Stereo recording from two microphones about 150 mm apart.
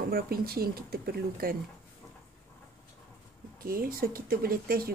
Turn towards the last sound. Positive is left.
turn(degrees=-75)  # may be behind; listen again after turning